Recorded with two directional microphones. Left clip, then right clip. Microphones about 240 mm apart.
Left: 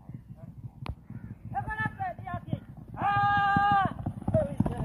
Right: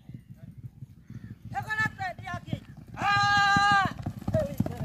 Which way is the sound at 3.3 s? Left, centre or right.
Centre.